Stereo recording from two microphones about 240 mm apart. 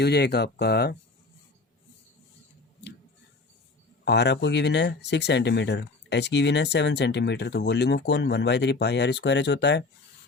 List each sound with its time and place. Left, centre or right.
0.0 s speech: left
4.0 s speech: left